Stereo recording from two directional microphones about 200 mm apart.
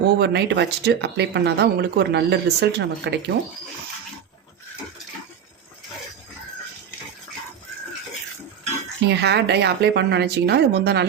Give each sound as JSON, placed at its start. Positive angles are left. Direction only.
{"t": 0.2, "sound": "speech", "side_deg": -55}
{"t": 9.0, "sound": "speech", "side_deg": -55}